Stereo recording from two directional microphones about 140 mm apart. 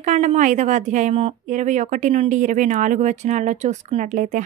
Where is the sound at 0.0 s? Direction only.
60° right (ahead or behind).